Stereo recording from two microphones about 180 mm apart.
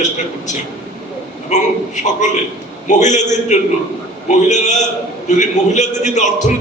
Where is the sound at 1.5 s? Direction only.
40° left (ahead or behind).